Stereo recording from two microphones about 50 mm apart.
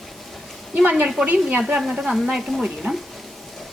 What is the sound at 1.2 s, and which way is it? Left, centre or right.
A woman's voice, centre.